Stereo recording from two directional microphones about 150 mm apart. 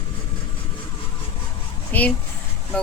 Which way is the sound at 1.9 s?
10° left (ahead or behind).